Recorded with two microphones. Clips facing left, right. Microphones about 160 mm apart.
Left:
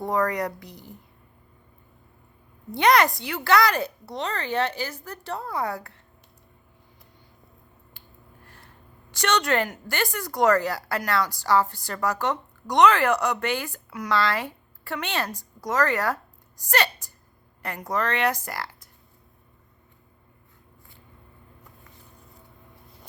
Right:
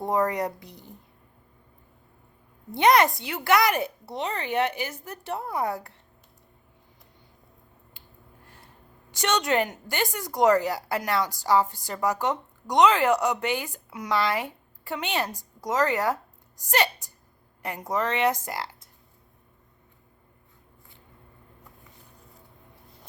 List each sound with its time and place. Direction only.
0.0 s speech: 25° right (ahead or behind)
2.7 s speech: 20° right (ahead or behind)
8.4 s a sound: 20° right (ahead or behind)
9.1 s speech: 20° right (ahead or behind)